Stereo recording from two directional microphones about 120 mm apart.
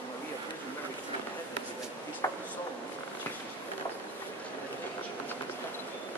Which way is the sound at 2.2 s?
25° left (ahead or behind).